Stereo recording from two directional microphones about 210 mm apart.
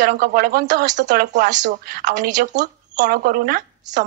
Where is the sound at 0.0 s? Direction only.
40° right (ahead or behind).